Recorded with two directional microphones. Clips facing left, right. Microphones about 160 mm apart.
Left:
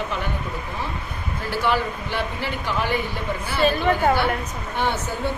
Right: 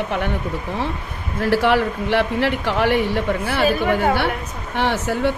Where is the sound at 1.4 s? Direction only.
75° right (ahead or behind).